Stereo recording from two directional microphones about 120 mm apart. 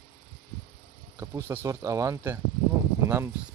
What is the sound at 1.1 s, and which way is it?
Speech, 25° right (ahead or behind).